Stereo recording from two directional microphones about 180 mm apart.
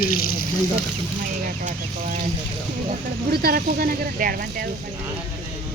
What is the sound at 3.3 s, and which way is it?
Speech, 55° right (ahead or behind).